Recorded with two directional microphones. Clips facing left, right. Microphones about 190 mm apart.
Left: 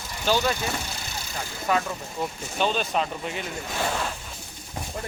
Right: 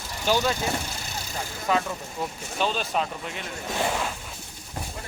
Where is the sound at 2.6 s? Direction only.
Centre (ahead or behind).